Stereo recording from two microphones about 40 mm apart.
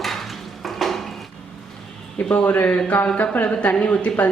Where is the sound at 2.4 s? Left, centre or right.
Left.